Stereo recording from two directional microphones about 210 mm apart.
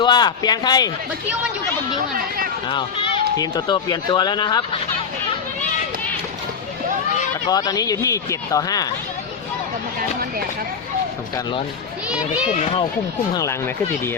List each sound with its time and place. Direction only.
0.0 s speech: 20° left (ahead or behind)
2.6 s speech: 20° left (ahead or behind)
7.5 s speech: 20° left (ahead or behind)
13.3 s speech: 15° left (ahead or behind)